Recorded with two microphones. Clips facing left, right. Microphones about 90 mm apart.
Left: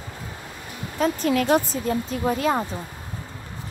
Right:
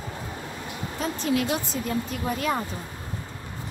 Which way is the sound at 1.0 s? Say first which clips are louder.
Left 5 dB; 45° left (ahead or behind).